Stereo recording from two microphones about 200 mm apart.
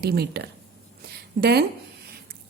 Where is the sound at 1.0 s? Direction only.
55° right (ahead or behind).